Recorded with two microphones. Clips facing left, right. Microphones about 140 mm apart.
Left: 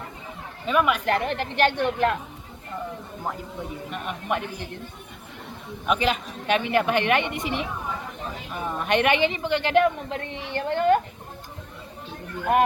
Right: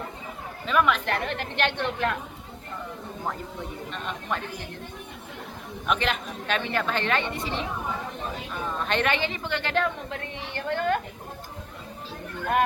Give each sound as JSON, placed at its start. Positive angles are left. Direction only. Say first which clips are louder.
{"t": 0.7, "sound": "speech", "louder": "left 2 dB", "side_deg": 10}
{"t": 3.9, "sound": "speech", "louder": "left 4 dB", "side_deg": 15}
{"t": 5.8, "sound": "a man's voice", "louder": "left 3 dB", "side_deg": 5}
{"t": 6.5, "sound": "speech", "louder": "left 6 dB", "side_deg": 15}